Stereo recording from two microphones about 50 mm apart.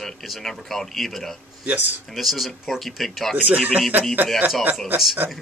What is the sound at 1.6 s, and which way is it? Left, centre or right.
Speech, right.